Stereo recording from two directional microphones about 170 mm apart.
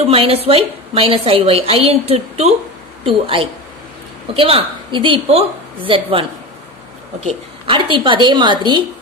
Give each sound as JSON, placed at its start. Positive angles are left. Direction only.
{"t": 0.0, "sound": "a woman's voice", "side_deg": -35}
{"t": 7.2, "sound": "a woman's voice", "side_deg": -30}